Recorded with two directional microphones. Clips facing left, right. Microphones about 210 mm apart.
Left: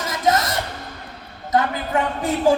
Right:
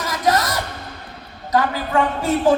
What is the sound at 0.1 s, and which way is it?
Music, 25° left (ahead or behind).